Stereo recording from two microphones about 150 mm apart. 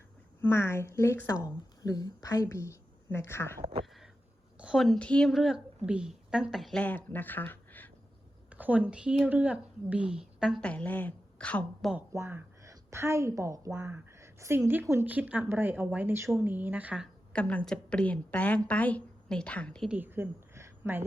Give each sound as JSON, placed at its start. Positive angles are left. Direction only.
{"t": 0.4, "sound": "speech", "side_deg": 15}
{"t": 3.6, "sound": "speech", "side_deg": -40}
{"t": 4.5, "sound": "a woman's voice", "side_deg": -5}
{"t": 8.4, "sound": "speech", "side_deg": -10}
{"t": 10.6, "sound": "a woman's voice", "side_deg": 10}
{"t": 11.9, "sound": "a woman's voice", "side_deg": -15}
{"t": 17.3, "sound": "a woman's voice", "side_deg": 10}
{"t": 19.9, "sound": "a sound", "side_deg": -15}